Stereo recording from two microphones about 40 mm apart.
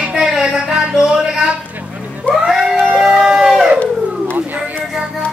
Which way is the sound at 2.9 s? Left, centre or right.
Centre.